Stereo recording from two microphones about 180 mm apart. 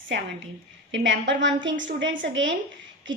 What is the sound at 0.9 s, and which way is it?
A woman's voice, 80° right.